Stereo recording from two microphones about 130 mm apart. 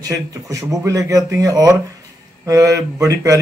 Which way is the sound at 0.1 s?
25° right (ahead or behind).